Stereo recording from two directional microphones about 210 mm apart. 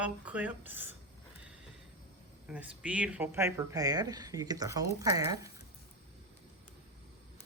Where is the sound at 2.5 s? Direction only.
5° right (ahead or behind).